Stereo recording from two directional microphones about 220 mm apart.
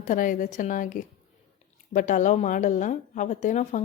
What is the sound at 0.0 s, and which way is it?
Speech, 35° left (ahead or behind).